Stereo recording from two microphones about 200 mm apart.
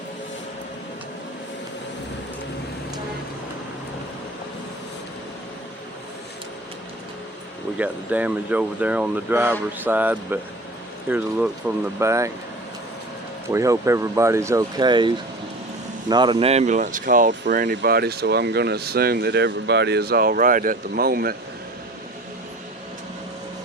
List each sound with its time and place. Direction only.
7.8 s speech: 5° right (ahead or behind)
13.5 s speech: 15° right (ahead or behind); by 21.3 s 50° right (ahead or behind)